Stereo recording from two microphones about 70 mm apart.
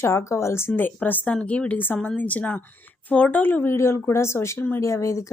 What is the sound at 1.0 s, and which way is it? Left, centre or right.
A woman's voice, left.